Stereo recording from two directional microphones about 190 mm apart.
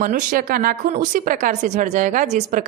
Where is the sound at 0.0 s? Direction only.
45° right (ahead or behind).